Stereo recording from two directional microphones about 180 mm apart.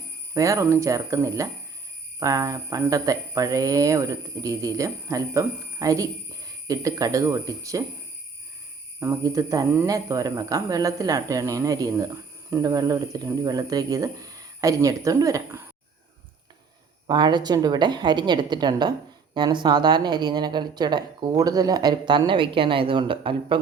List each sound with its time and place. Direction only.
0.3 s speech: 15° right (ahead or behind)
9.0 s speech: 15° right (ahead or behind)
17.1 s speech: 25° right (ahead or behind)